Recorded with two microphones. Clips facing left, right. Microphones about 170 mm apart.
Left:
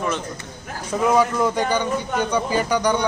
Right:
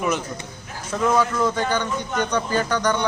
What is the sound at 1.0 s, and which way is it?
A man's voice, 10° left (ahead or behind).